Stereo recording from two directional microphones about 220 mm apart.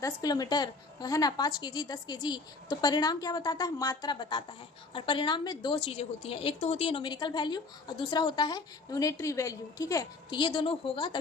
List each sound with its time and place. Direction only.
0.0 s a woman's voice: 15° left (ahead or behind)